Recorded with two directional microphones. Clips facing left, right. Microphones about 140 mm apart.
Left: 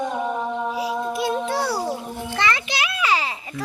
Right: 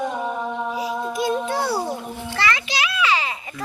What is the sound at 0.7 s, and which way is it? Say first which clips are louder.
Child singing: even; centre (ahead or behind).